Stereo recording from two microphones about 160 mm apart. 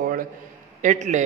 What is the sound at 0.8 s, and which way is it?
Speech, 50° right (ahead or behind).